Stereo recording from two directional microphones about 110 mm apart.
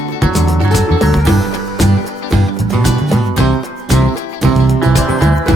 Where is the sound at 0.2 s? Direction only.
Centre (ahead or behind).